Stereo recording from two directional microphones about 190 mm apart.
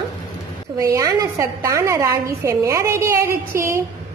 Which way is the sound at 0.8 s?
15° right (ahead or behind).